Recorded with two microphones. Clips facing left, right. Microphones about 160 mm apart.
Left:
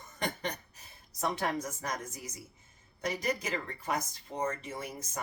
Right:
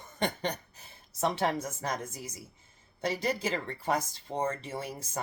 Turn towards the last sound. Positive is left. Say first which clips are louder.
# right 3 dB
turn(degrees=-30)  # may be behind; listen again after turning